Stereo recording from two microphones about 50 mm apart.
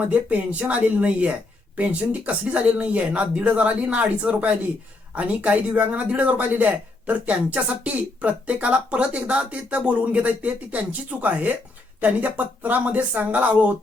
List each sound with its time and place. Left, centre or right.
0.0 s speech: right